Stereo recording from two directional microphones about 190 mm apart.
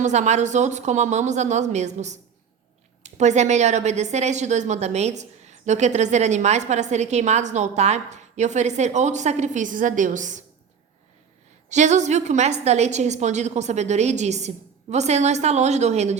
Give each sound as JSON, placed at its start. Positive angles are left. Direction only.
{"t": 0.0, "sound": "a woman's voice", "side_deg": -40}
{"t": 11.7, "sound": "a woman's voice", "side_deg": -40}